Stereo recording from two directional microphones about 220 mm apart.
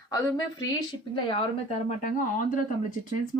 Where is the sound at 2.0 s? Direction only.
40° left (ahead or behind).